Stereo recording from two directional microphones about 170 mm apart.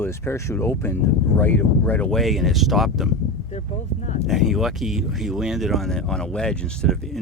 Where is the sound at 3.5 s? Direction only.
40° left (ahead or behind).